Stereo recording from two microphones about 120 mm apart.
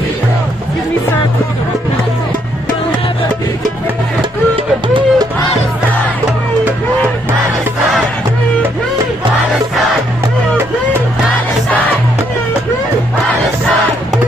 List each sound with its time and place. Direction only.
4.8 s music: 40° right (ahead or behind)